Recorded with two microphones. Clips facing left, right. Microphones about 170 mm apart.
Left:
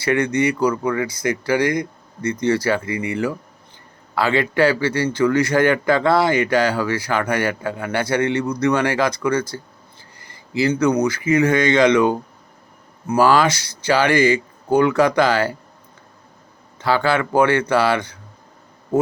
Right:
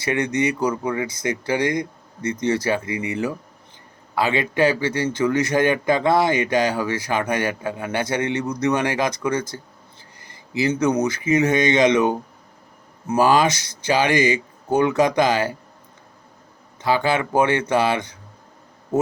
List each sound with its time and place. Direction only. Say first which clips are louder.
0.0 s a man's voice: left 3 dB; 20° right (ahead or behind)
16.8 s a man's voice: left 1 dB; 15° right (ahead or behind)